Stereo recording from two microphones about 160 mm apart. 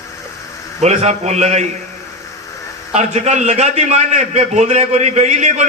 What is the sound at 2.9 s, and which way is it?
A man's voice, 45° right (ahead or behind).